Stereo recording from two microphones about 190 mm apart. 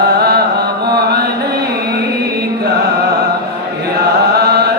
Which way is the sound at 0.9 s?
55° right (ahead or behind).